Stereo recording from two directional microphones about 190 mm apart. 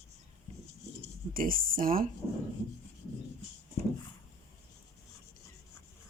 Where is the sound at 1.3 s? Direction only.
50° right (ahead or behind).